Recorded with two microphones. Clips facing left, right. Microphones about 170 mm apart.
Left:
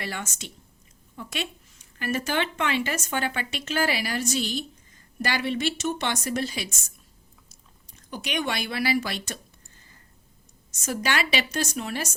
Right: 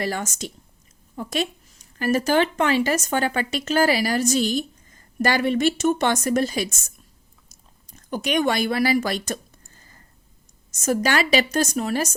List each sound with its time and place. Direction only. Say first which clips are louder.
0.0 s a woman's voice: right 8 dB; 40° right (ahead or behind)
7.9 s a woman's voice: right 8 dB; 45° right (ahead or behind)
10.7 s a woman's voice: right 6 dB; 45° right (ahead or behind)